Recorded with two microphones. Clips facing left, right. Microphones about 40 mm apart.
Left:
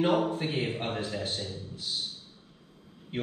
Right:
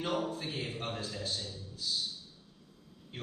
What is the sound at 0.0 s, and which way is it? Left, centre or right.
A man's voice, left.